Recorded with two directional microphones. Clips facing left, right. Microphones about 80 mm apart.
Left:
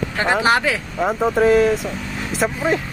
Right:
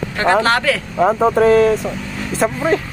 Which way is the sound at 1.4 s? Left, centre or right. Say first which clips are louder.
Right 2 dB; centre.